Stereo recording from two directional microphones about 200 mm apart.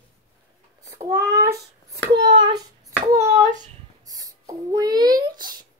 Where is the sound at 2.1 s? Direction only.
25° right (ahead or behind).